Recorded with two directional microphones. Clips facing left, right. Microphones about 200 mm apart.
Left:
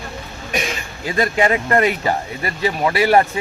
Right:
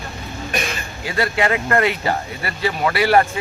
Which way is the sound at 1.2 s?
25° left (ahead or behind).